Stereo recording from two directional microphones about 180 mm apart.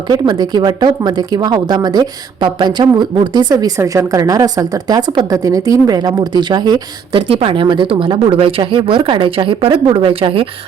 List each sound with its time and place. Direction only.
0.1 s speech: 25° right (ahead or behind)